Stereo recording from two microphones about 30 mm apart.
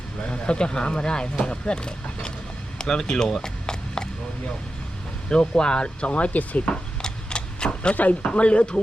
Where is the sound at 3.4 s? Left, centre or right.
Left.